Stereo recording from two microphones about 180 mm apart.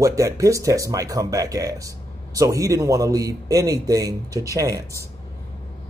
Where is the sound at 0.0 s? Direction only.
15° right (ahead or behind).